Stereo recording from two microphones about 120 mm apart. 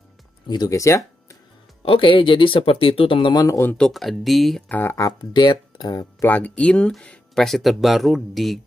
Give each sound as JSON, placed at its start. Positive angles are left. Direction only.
{"t": 0.5, "sound": "speech", "side_deg": 30}
{"t": 1.9, "sound": "speech", "side_deg": 45}
{"t": 3.3, "sound": "speech", "side_deg": 25}
{"t": 3.7, "sound": "speech", "side_deg": 5}
{"t": 4.6, "sound": "speech", "side_deg": 15}
{"t": 5.2, "sound": "speech", "side_deg": 35}
{"t": 6.2, "sound": "speech", "side_deg": 15}